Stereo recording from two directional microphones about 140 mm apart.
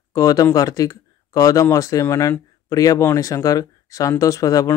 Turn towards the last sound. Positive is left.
turn(degrees=25)  # may be behind; listen again after turning